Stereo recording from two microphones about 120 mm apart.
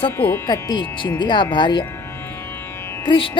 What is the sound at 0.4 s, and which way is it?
Speech, 35° left (ahead or behind).